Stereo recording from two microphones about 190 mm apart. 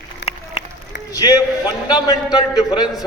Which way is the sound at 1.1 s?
20° left (ahead or behind).